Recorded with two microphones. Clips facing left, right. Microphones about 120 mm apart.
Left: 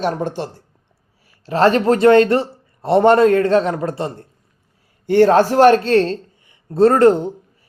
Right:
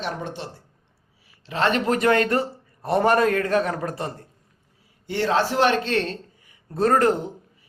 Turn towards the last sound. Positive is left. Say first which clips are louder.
# left 8 dB
turn(degrees=30)  # may be behind; listen again after turning